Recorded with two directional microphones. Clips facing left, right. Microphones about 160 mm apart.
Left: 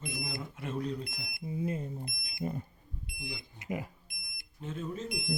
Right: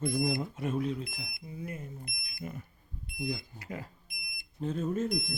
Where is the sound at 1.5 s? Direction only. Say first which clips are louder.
Left 7 dB; 25° left (ahead or behind).